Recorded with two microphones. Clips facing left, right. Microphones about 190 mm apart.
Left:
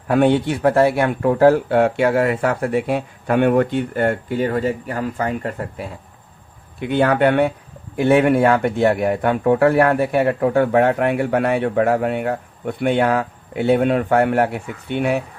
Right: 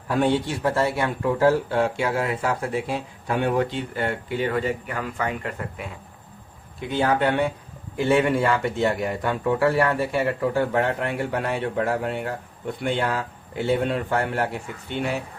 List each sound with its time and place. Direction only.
0.1 s speech: 60° left (ahead or behind); by 5.9 s 35° left (ahead or behind)
6.7 s speech: 60° left (ahead or behind)